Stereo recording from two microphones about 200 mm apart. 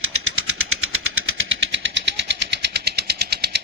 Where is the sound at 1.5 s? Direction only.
65° right (ahead or behind).